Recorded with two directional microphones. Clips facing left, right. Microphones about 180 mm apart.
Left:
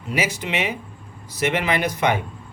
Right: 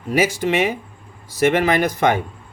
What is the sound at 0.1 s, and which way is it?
Speech, 45° right (ahead or behind).